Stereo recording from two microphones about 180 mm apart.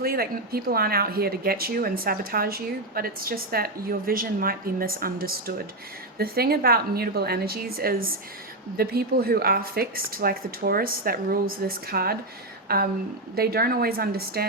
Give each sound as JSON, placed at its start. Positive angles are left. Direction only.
{"t": 0.0, "sound": "speech", "side_deg": -55}